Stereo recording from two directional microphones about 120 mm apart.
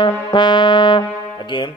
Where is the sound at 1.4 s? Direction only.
40° left (ahead or behind).